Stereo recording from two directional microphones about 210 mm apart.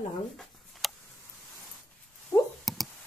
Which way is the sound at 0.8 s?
Centre (ahead or behind).